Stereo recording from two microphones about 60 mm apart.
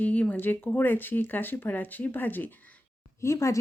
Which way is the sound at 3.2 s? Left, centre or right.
Left.